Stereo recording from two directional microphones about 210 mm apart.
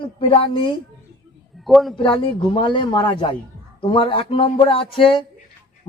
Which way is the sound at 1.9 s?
25° left (ahead or behind).